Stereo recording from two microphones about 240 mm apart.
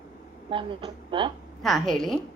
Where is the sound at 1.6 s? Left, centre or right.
Centre.